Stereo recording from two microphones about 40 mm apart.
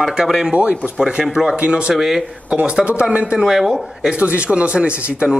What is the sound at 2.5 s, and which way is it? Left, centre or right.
Speech, right.